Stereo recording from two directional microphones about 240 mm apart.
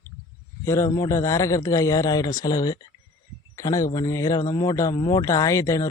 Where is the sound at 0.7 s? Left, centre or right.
Centre.